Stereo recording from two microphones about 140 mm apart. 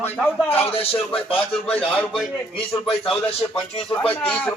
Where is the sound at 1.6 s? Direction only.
10° left (ahead or behind).